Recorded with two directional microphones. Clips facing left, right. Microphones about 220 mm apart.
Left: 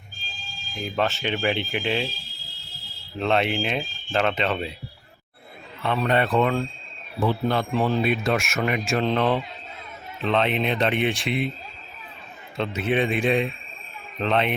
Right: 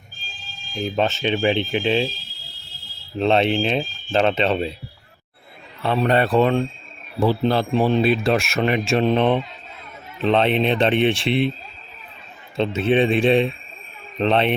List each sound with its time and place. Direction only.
0.7 s speech: 25° right (ahead or behind)
3.2 s speech: 25° right (ahead or behind)
5.8 s speech: 35° right (ahead or behind)
10.2 s speech: 30° right (ahead or behind)
12.5 s speech: 25° right (ahead or behind)